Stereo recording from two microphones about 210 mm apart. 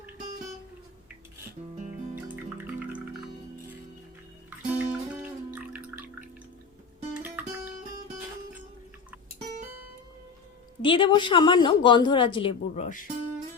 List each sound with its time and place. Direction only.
2.3 s music: 10° right (ahead or behind)
4.4 s music: 5° right (ahead or behind)
10.8 s a woman's voice: 25° left (ahead or behind)